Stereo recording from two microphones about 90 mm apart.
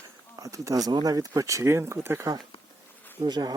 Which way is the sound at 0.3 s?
40° right (ahead or behind).